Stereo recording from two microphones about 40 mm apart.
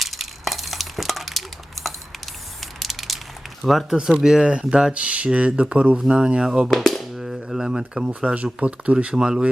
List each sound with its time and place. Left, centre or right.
0.0 s stir: centre
2.7 s a sound: centre
3.6 s speech: centre
4.2 s speech: centre
4.4 s speech: right
4.9 s speech: right
6.1 s speech: right
6.7 s music: centre
7.2 s a sound: centre
8.2 s speech: right